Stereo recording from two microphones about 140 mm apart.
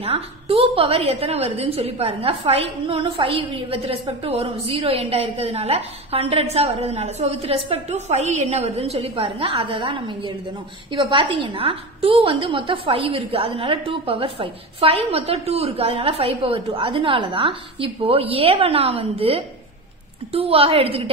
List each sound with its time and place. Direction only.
0.0 s a woman's voice: 45° right (ahead or behind)